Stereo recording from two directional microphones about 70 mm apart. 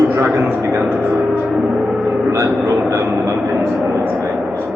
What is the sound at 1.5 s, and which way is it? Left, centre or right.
Speech, centre.